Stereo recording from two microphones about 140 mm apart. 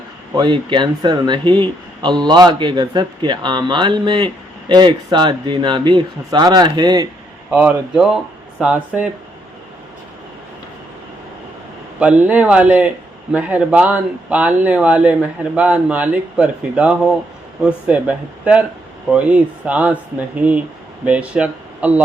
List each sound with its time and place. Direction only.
0.3 s speech: 35° right (ahead or behind)
7.5 s speech: 10° right (ahead or behind)
11.9 s speech: 10° right (ahead or behind)
19.1 s speech: 10° right (ahead or behind)